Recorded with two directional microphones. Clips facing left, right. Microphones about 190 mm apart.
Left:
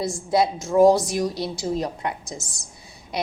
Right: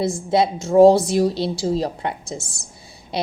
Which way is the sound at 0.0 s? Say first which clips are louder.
Right 3 dB; 25° right (ahead or behind).